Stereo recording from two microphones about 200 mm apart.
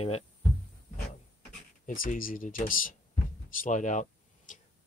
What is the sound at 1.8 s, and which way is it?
Speech, 40° left (ahead or behind).